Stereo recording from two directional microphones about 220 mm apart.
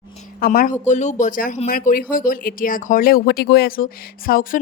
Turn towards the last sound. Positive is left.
turn(degrees=40)  # may be behind; listen again after turning